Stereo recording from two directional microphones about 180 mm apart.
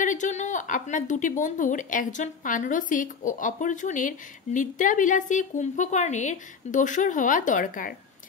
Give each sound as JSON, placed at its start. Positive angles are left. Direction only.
{"t": 0.0, "sound": "a woman's voice", "side_deg": 45}